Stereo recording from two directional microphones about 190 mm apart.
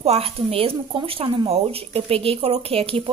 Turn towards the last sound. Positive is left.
turn(degrees=-30)  # may be behind; listen again after turning